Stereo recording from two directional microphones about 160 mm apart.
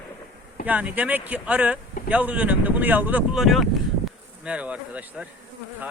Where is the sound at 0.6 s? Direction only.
10° right (ahead or behind).